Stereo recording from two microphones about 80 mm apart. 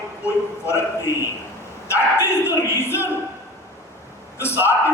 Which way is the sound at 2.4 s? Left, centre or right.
Left.